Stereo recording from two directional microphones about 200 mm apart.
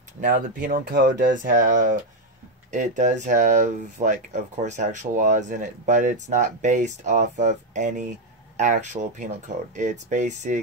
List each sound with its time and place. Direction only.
0.2 s speech: 40° right (ahead or behind)
1.3 s speech: 40° right (ahead or behind)